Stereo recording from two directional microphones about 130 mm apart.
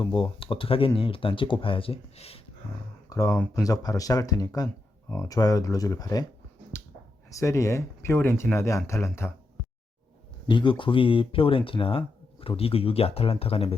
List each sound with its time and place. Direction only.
0.0 s speech: 40° left (ahead or behind)
3.1 s speech: 25° left (ahead or behind)
7.3 s speech: 25° left (ahead or behind)
10.5 s speech: 40° left (ahead or behind)